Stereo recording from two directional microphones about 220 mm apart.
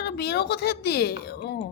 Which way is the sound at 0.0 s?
45° left (ahead or behind).